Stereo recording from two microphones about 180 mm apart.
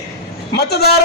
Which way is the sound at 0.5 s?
65° left (ahead or behind).